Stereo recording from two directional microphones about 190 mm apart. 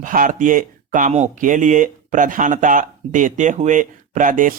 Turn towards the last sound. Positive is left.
turn(degrees=-45)  # may be behind; listen again after turning